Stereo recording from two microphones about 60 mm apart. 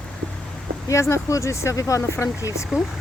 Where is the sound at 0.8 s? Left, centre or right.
Left.